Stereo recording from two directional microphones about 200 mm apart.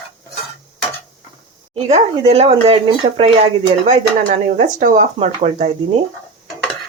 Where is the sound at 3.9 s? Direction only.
40° right (ahead or behind).